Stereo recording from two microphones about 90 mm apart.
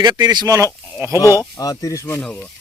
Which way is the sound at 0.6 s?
35° right (ahead or behind).